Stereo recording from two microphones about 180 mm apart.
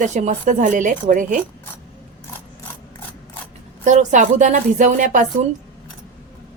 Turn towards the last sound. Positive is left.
turn(degrees=-45)  # may be behind; listen again after turning